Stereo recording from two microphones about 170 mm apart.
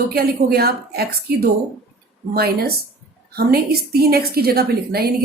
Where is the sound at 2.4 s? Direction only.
65° right (ahead or behind).